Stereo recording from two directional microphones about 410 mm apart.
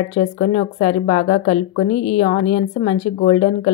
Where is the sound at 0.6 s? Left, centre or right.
Centre.